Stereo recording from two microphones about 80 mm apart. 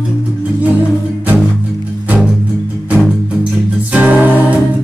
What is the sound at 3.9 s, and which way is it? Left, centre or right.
Music, right.